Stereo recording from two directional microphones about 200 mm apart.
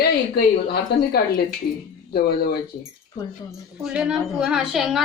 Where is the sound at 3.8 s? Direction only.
5° right (ahead or behind).